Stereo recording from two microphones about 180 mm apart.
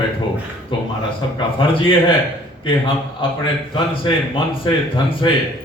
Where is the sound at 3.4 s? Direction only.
25° left (ahead or behind).